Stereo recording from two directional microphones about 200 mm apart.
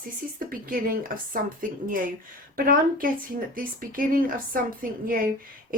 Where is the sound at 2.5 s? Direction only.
45° right (ahead or behind).